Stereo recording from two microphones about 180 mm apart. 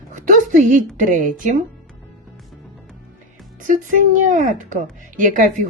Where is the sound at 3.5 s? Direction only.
45° right (ahead or behind).